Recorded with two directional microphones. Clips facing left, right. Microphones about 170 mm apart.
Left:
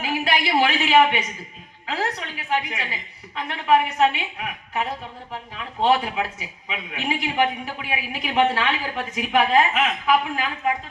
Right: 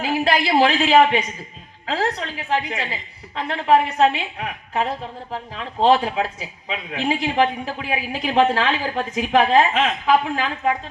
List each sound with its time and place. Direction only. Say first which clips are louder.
0.0 s a woman's voice: right 4 dB; 30° right (ahead or behind)